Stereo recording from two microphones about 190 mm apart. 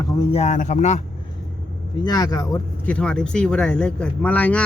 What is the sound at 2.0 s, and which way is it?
Speech, 20° left (ahead or behind).